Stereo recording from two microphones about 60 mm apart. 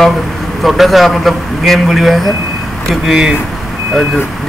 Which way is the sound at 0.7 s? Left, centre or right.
Centre.